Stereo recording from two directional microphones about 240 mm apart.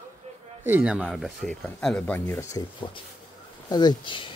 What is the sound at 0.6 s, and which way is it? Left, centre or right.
Speech, centre.